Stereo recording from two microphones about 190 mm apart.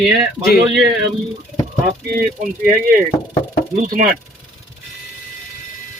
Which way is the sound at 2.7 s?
45° right (ahead or behind).